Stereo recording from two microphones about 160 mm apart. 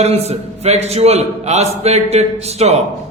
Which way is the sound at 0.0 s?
40° right (ahead or behind).